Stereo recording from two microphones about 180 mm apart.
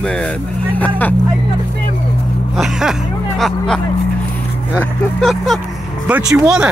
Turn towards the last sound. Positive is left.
turn(degrees=-5)  # may be behind; listen again after turning